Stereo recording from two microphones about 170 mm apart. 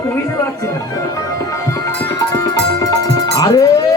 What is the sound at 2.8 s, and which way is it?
Music, 20° left (ahead or behind).